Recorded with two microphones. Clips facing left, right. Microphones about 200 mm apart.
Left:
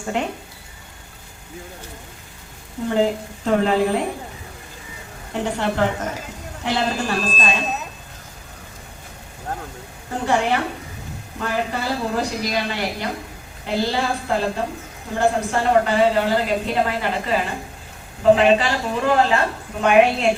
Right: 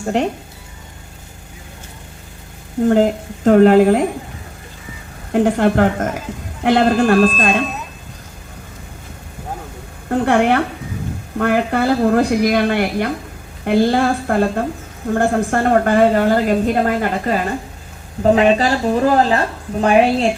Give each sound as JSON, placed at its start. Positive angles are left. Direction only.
{"t": 0.0, "sound": "a woman's voice", "side_deg": -40}
{"t": 2.9, "sound": "a woman's voice", "side_deg": -50}
{"t": 5.3, "sound": "a woman's voice", "side_deg": -50}
{"t": 10.1, "sound": "a woman's voice", "side_deg": -60}